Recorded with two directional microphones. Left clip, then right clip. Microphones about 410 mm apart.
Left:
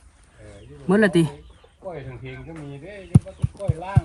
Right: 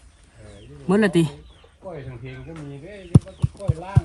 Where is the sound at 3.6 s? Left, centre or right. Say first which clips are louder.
Left 2 dB; centre.